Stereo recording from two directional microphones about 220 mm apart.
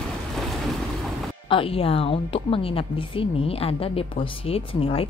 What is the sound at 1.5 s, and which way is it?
A woman's voice, 25° left (ahead or behind).